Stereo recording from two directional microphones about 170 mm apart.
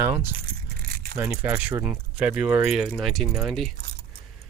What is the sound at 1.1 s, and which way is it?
Speech, 10° right (ahead or behind).